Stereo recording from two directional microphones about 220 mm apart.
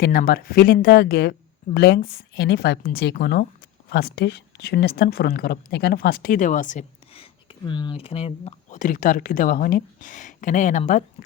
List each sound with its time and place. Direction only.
0.0 s a woman's voice: 40° left (ahead or behind)